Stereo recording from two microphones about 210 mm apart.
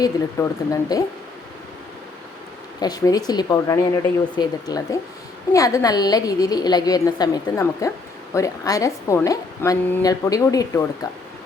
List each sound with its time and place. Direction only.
0.0 s a woman's voice: 15° left (ahead or behind)
2.8 s a woman's voice: 20° left (ahead or behind)